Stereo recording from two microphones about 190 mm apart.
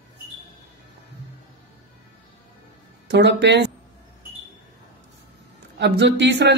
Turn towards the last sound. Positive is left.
turn(degrees=-65)  # may be behind; listen again after turning